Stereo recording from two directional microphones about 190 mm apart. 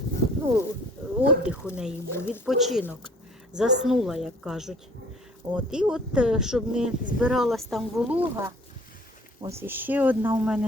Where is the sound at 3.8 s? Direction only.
Centre (ahead or behind).